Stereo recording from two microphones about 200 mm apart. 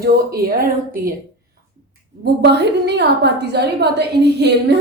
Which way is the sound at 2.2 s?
55° right (ahead or behind).